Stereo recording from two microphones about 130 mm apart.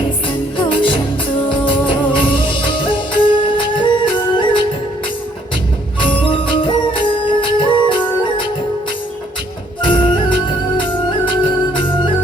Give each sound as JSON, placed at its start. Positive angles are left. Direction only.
{"t": 0.3, "sound": "music", "side_deg": 40}
{"t": 6.0, "sound": "music", "side_deg": 40}
{"t": 9.8, "sound": "music", "side_deg": 40}